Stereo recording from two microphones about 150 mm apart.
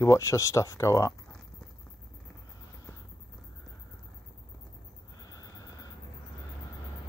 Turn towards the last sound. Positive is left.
turn(degrees=25)  # may be behind; listen again after turning